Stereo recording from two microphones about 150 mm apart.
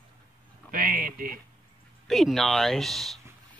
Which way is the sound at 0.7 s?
70° right (ahead or behind).